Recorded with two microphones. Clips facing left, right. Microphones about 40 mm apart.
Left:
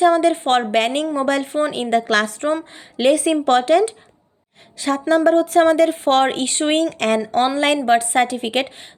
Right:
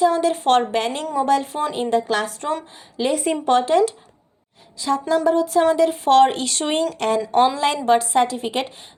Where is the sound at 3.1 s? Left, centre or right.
Left.